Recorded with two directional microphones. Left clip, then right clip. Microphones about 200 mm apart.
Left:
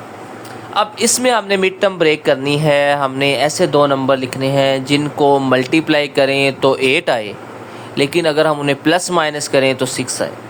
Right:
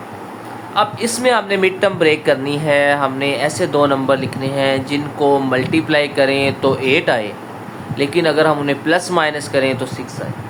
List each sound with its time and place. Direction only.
0.7 s a man's voice: 35° left (ahead or behind)